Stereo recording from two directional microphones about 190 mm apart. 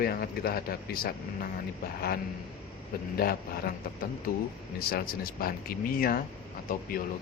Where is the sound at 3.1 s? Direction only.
55° left (ahead or behind).